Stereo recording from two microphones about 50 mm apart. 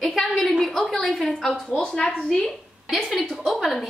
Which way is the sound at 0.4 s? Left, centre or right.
Centre.